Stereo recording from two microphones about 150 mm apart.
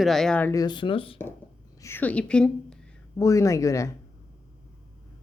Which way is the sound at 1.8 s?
15° left (ahead or behind).